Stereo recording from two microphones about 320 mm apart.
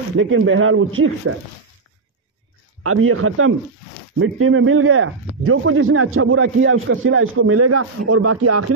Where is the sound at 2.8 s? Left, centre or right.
Right.